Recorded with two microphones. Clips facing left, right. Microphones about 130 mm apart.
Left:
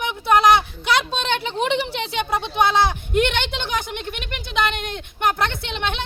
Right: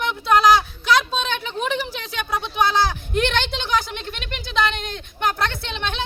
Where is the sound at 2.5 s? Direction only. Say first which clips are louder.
Left 1 dB; 25° left (ahead or behind).